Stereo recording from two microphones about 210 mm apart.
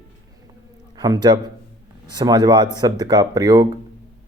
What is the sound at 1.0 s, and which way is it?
A man's voice, 20° right (ahead or behind).